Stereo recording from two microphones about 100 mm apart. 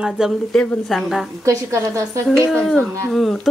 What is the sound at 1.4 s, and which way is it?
Speech, 30° right (ahead or behind).